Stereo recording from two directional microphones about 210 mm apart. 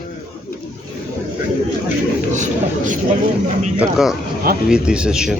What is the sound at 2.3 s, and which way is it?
Speech, 35° right (ahead or behind).